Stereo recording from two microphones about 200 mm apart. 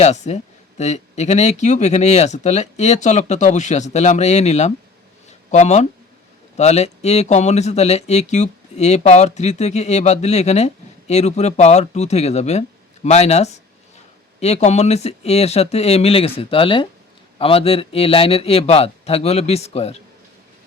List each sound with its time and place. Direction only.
0.0 s a man's voice: 35° left (ahead or behind)